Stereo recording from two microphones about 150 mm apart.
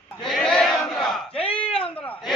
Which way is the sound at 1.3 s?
40° left (ahead or behind).